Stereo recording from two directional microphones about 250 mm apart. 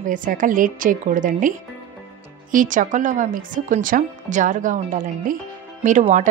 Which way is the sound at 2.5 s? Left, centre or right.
Right.